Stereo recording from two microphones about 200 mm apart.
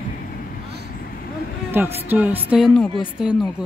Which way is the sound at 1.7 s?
10° right (ahead or behind).